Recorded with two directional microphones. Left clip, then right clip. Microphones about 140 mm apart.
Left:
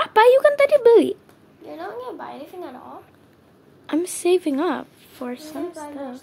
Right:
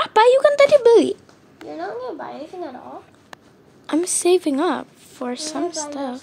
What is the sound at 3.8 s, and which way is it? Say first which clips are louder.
A woman's voice: right 2 dB; centre (ahead or behind).